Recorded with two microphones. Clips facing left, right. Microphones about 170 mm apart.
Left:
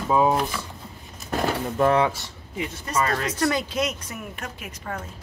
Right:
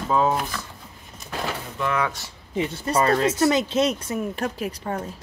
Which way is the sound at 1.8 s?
45° left (ahead or behind).